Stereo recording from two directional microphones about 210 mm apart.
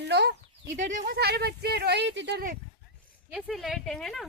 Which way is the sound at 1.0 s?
50° right (ahead or behind).